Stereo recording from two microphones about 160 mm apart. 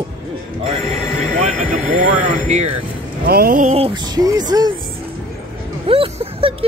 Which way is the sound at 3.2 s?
70° right (ahead or behind).